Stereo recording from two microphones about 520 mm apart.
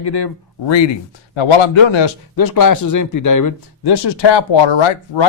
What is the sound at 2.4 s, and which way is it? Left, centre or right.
Speech, left.